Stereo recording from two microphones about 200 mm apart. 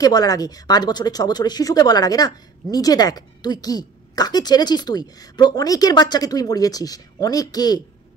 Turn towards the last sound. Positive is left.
turn(degrees=20)  # may be behind; listen again after turning